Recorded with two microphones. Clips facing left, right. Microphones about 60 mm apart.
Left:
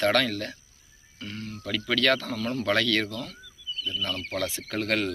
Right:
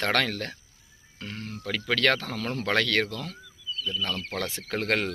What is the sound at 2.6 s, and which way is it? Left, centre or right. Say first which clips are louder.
Speech: even; right.